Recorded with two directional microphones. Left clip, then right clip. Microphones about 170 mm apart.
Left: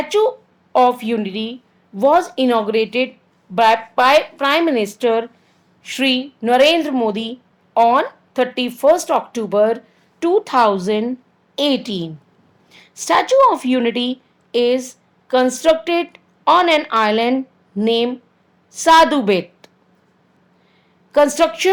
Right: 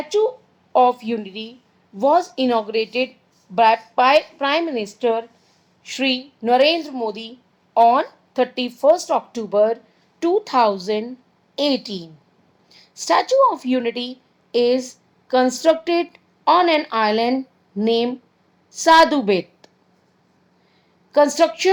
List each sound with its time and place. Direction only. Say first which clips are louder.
0.0 s a woman's voice: left 3 dB; 25° left (ahead or behind)
21.1 s speech: left 2 dB; 25° left (ahead or behind)